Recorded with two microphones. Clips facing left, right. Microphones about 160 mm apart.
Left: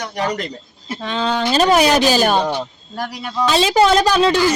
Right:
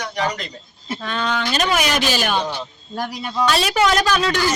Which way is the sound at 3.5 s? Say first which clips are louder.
Left 6 dB; 25° left (ahead or behind).